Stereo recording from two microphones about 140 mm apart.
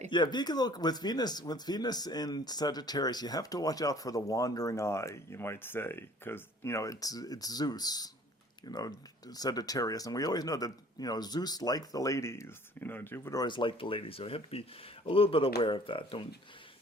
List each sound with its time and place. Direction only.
0.1 s speech: 30° left (ahead or behind); by 13.4 s 15° left (ahead or behind)
13.4 s speech: 35° left (ahead or behind)